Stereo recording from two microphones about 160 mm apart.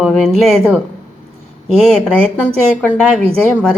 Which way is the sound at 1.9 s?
5° left (ahead or behind).